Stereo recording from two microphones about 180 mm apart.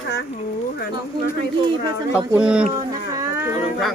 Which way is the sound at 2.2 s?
5° right (ahead or behind).